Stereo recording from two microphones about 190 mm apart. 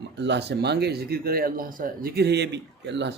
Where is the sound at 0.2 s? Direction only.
65° right (ahead or behind).